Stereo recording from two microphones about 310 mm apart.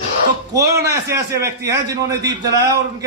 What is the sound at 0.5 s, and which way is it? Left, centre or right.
A man's voice, centre.